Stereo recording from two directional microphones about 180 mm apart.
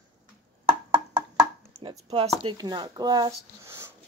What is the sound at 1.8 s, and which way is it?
Speech, 30° right (ahead or behind).